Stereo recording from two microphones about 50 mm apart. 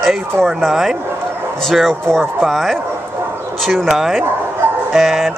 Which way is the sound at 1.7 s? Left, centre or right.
Centre.